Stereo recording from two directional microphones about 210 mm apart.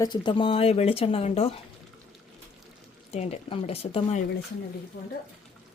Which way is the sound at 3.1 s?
30° left (ahead or behind).